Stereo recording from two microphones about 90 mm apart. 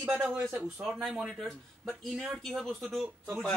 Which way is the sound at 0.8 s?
Centre (ahead or behind).